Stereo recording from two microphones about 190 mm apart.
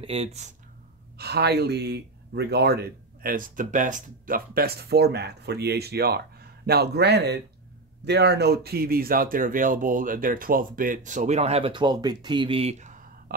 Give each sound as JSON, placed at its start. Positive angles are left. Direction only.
{"t": 0.0, "sound": "speech", "side_deg": -30}
{"t": 1.1, "sound": "speech", "side_deg": -60}